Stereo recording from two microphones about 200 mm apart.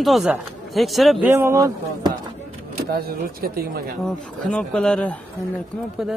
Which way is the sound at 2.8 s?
50° right (ahead or behind).